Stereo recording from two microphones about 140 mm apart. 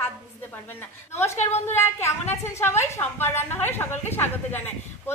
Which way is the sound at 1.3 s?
55° left (ahead or behind).